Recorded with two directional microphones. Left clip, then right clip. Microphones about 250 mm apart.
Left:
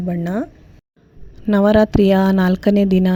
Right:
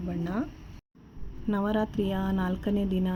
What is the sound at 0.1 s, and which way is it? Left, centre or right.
Speech, left.